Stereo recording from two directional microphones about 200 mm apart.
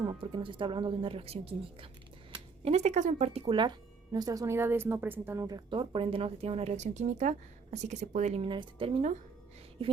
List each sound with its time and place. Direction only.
0.0 s speech: 25° right (ahead or behind)